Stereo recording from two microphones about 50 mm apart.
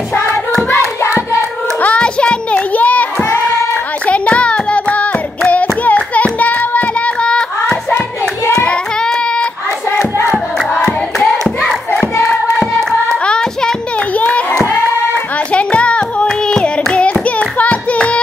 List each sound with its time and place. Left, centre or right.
1.8 s hands: left
4.0 s child singing: left
5.9 s hands: left
8.6 s child singing: centre
9.8 s hands: left
13.2 s music: centre
13.9 s clapping: left
15.3 s hands: left